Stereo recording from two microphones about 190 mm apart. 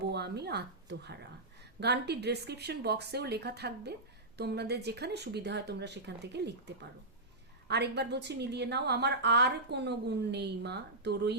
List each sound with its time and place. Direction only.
0.0 s a woman's voice: 60° right (ahead or behind)